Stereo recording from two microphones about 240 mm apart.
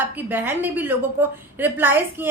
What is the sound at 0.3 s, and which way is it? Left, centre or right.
A woman's voice, centre.